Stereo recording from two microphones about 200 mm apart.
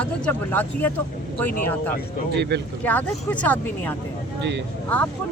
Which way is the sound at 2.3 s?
55° right (ahead or behind).